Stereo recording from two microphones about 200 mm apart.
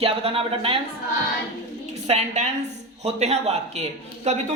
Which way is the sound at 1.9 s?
35° right (ahead or behind).